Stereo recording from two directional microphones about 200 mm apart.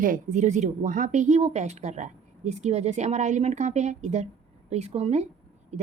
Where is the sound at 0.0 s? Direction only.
40° right (ahead or behind).